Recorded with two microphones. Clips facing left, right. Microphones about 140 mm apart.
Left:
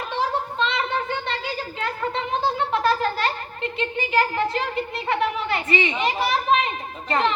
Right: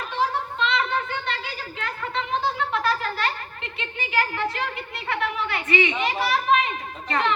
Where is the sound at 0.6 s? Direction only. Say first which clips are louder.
Right 1 dB; 30° left (ahead or behind).